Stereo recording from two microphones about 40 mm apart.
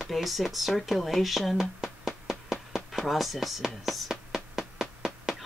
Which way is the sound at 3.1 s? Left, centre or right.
Centre.